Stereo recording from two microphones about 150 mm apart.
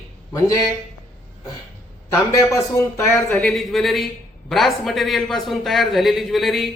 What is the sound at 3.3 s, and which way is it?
A man's voice, 5° left (ahead or behind).